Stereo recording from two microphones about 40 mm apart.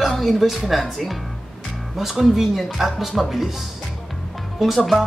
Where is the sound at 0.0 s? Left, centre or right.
Centre.